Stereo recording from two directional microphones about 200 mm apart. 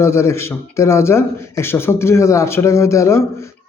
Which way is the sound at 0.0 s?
15° left (ahead or behind).